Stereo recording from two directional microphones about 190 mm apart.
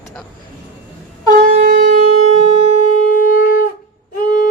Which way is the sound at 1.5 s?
40° right (ahead or behind).